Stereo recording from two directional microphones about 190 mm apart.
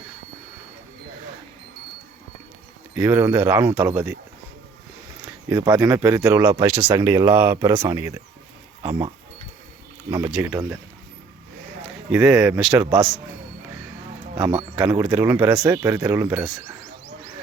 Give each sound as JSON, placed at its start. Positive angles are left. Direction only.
{"t": 2.9, "sound": "speech", "side_deg": -10}
{"t": 5.2, "sound": "a sound", "side_deg": -15}
{"t": 5.8, "sound": "speech", "side_deg": -10}
{"t": 10.1, "sound": "speech", "side_deg": -15}
{"t": 11.8, "sound": "a man's voice", "side_deg": 0}
{"t": 14.8, "sound": "speech", "side_deg": -5}
{"t": 15.6, "sound": "speech", "side_deg": -15}
{"t": 16.4, "sound": "speech", "side_deg": 0}